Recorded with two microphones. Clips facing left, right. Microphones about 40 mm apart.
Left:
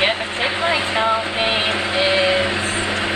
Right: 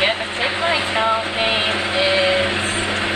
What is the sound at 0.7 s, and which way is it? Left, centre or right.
Speech, right.